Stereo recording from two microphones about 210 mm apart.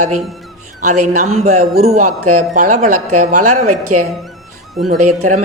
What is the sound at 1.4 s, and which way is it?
Speech, 30° right (ahead or behind).